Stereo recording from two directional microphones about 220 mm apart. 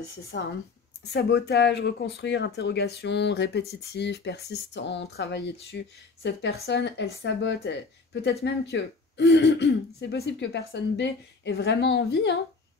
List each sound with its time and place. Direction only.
0.3 s speech: 50° left (ahead or behind)